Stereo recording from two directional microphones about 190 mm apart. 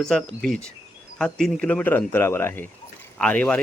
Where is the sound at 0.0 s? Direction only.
5° left (ahead or behind).